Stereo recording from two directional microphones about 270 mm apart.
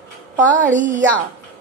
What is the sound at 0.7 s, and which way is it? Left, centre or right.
Speech, right.